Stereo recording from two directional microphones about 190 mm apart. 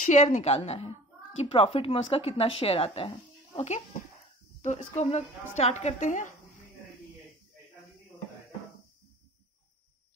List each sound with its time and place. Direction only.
0.0 s a woman's voice: 40° left (ahead or behind)